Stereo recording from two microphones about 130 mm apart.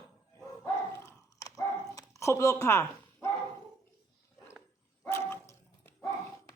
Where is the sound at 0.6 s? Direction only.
20° left (ahead or behind).